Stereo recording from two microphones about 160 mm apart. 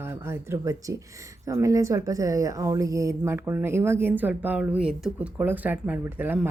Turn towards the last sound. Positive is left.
turn(degrees=-10)  # may be behind; listen again after turning